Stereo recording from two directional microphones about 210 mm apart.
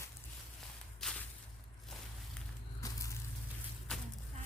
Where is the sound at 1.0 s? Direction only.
Centre (ahead or behind).